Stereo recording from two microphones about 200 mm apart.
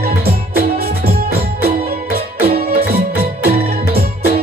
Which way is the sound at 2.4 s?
50° right (ahead or behind).